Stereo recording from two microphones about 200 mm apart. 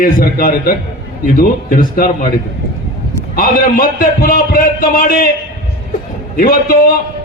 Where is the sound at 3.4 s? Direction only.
45° left (ahead or behind).